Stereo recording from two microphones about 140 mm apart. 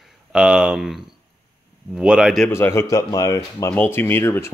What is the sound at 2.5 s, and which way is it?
Speech, 20° left (ahead or behind).